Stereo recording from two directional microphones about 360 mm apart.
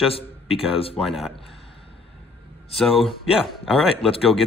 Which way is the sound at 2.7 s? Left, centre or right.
Centre.